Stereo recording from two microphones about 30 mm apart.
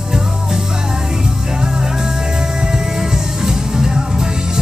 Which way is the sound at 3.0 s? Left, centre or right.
Centre.